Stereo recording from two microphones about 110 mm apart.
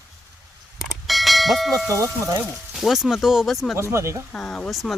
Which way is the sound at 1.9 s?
30° right (ahead or behind).